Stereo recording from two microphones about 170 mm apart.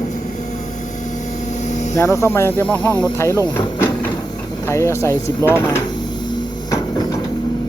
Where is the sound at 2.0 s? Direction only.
15° left (ahead or behind).